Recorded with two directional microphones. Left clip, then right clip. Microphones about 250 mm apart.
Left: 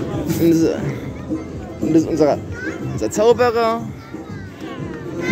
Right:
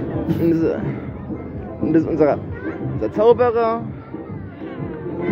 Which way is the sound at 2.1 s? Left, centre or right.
Centre.